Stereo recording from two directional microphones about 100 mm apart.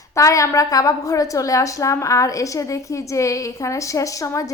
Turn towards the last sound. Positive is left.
turn(degrees=35)  # may be behind; listen again after turning